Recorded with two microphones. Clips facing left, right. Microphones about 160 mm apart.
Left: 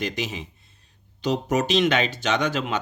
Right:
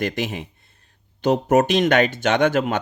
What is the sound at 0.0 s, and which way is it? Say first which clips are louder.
Speech: right 4 dB; 55° right (ahead or behind).